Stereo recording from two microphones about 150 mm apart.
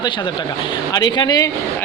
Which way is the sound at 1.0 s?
30° left (ahead or behind).